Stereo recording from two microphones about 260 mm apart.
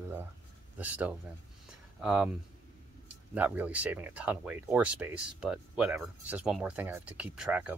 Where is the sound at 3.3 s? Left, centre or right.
Centre.